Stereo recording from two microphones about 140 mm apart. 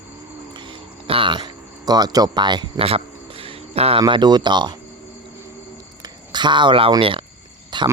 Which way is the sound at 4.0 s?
30° right (ahead or behind).